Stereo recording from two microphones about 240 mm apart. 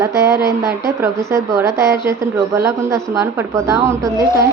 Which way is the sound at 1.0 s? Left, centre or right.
Centre.